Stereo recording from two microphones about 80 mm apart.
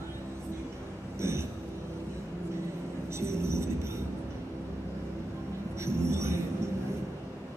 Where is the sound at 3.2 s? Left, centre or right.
Right.